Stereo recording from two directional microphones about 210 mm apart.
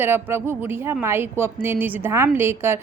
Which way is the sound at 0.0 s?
10° right (ahead or behind).